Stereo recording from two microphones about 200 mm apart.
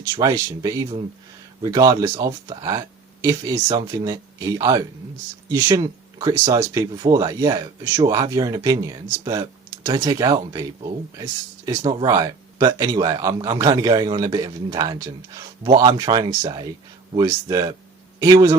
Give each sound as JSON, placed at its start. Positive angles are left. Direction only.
{"t": 0.0, "sound": "speech", "side_deg": -15}